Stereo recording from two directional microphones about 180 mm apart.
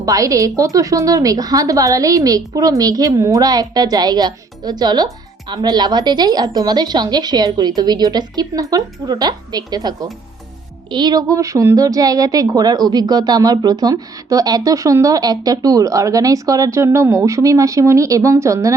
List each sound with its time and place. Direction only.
0.0 s a woman's voice: 20° right (ahead or behind)